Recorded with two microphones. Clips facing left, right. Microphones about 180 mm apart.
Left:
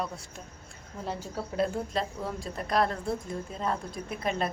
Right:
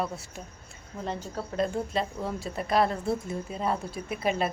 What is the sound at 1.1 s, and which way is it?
Speech, 5° left (ahead or behind).